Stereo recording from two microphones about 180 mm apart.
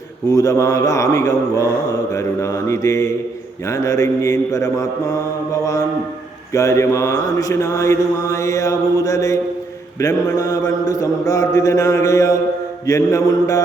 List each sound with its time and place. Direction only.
0.3 s mantra: 20° left (ahead or behind)
6.5 s mantra: 15° left (ahead or behind)